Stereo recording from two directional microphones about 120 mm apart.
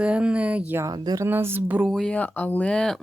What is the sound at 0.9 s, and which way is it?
Speech, 30° right (ahead or behind).